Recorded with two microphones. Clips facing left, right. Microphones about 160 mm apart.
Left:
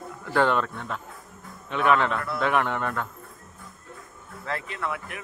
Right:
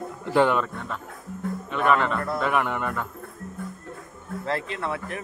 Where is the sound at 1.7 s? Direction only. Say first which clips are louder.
Even; centre (ahead or behind).